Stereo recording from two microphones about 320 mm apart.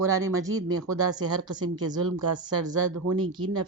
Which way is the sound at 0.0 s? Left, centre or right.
Centre.